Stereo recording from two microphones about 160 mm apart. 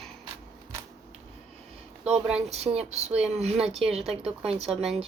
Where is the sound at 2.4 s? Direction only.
40° right (ahead or behind).